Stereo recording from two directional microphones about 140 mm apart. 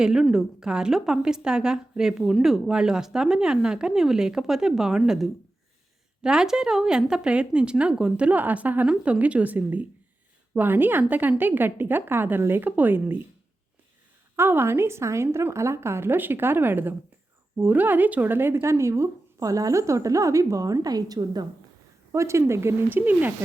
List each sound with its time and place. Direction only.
0.0 s a woman's voice: 5° right (ahead or behind)
14.3 s speech: 15° right (ahead or behind)